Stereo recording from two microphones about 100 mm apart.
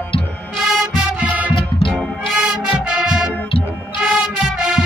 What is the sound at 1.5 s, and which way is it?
Music, 60° left (ahead or behind).